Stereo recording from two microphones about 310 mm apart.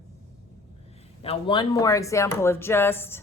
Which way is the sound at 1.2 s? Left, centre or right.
Centre.